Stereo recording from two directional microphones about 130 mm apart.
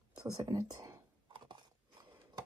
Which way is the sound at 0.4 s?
30° right (ahead or behind).